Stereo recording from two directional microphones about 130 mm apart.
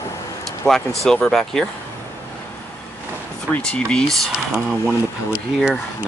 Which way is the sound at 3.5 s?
5° left (ahead or behind).